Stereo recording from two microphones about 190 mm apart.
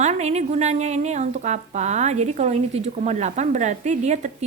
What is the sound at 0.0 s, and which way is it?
A woman's voice, 35° right (ahead or behind).